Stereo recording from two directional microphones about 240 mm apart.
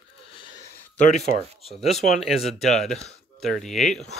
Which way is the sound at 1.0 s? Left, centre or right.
Left.